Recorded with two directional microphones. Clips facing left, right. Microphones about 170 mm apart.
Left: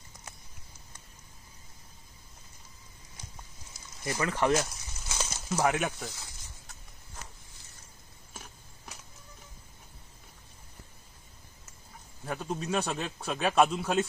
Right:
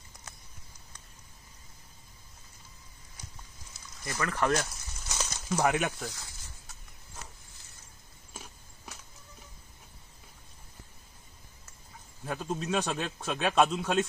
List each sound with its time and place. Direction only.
4.0 s speech: 20° left (ahead or behind)
4.6 s a sound: 10° left (ahead or behind)
12.4 s a man's voice: centre (ahead or behind)